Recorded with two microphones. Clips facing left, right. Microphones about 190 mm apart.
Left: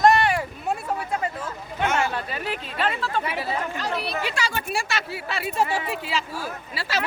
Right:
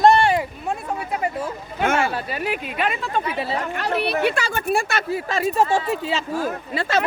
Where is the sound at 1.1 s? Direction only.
10° right (ahead or behind).